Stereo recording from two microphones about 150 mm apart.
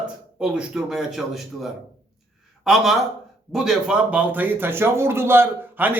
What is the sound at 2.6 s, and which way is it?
A man's voice, centre (ahead or behind).